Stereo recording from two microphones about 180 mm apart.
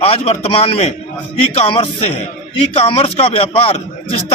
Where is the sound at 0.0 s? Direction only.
35° left (ahead or behind).